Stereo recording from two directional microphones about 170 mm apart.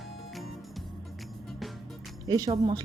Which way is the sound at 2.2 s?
25° right (ahead or behind).